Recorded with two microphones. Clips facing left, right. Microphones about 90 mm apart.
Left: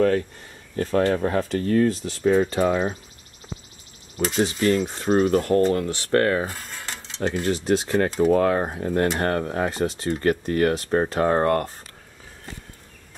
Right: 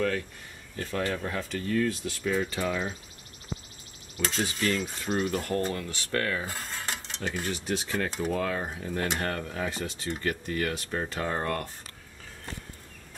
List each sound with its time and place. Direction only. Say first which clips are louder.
0.7 s speech: left 10 dB; 40° left (ahead or behind)
4.4 s speech: left 9 dB; 30° left (ahead or behind)
7.9 s speech: left 11 dB; 45° left (ahead or behind)